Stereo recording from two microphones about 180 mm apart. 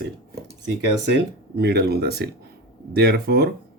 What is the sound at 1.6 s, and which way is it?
Speech, 60° right (ahead or behind).